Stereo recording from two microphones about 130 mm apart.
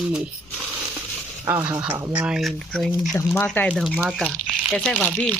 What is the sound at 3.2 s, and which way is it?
Speech, 10° left (ahead or behind).